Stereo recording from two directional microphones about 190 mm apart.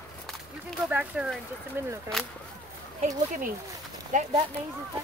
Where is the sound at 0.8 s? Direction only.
5° right (ahead or behind).